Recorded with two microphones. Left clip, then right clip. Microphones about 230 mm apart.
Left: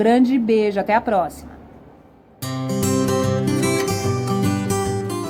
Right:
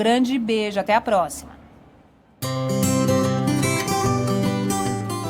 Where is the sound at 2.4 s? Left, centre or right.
Centre.